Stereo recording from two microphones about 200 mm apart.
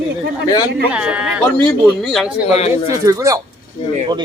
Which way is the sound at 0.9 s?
5° right (ahead or behind).